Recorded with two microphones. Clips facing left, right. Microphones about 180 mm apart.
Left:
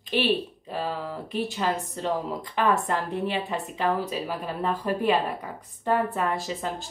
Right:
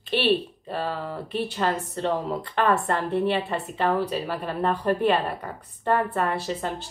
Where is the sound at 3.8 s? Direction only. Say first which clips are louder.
Right 3 dB; 60° right (ahead or behind).